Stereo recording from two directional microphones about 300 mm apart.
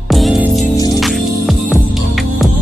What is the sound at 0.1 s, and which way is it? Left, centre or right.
Music, centre.